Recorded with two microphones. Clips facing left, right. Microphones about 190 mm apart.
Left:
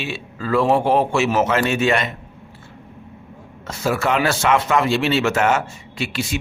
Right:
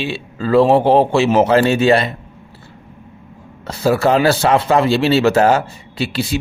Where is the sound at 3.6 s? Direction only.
35° right (ahead or behind).